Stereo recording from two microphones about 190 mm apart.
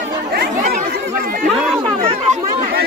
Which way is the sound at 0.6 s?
50° right (ahead or behind).